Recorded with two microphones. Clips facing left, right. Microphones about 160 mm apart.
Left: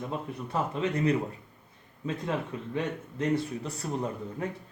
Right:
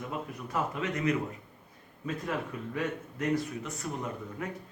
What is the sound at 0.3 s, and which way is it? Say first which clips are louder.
Speech: left 1 dB; 30° left (ahead or behind).